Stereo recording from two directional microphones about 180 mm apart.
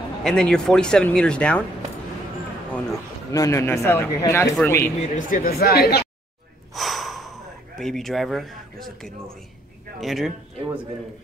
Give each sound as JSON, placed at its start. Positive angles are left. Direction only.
{"t": 0.2, "sound": "speech", "side_deg": 5}
{"t": 3.3, "sound": "speech", "side_deg": 15}
{"t": 5.0, "sound": "speech", "side_deg": 45}
{"t": 6.7, "sound": "gasp", "side_deg": 0}
{"t": 9.9, "sound": "speech", "side_deg": 0}